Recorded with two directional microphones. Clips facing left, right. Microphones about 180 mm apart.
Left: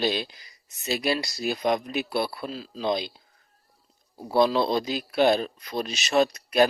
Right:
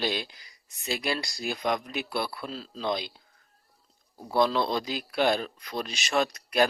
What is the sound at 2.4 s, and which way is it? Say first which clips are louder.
Speech: left 3 dB; 5° left (ahead or behind).